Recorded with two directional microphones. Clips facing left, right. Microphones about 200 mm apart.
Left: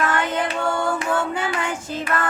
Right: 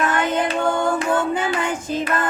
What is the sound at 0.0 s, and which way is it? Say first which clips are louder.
Child singing: right 2 dB; 20° right (ahead or behind).